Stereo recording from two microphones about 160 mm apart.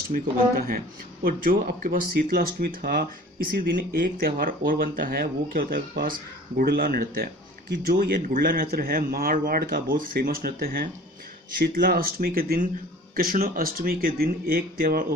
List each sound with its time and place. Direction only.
0.1 s speech: 65° right (ahead or behind)